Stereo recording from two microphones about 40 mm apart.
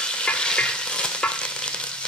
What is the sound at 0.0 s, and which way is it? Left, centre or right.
Stir, left.